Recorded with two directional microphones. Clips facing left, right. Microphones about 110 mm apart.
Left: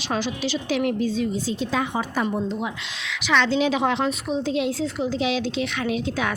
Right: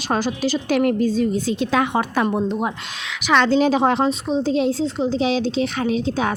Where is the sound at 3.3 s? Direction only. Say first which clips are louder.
Right 5 dB; 45° right (ahead or behind).